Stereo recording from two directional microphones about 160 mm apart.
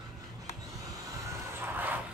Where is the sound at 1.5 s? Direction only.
15° right (ahead or behind).